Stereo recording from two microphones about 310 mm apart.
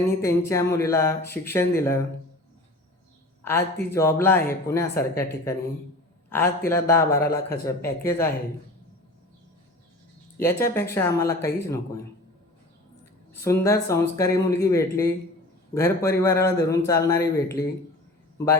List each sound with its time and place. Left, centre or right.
0.2 s a man's voice: centre
3.4 s a man's voice: centre
10.3 s a man's voice: centre
13.3 s a man's voice: centre